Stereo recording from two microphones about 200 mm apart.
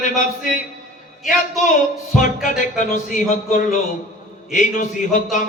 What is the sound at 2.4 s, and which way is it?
A man's voice, 40° left (ahead or behind).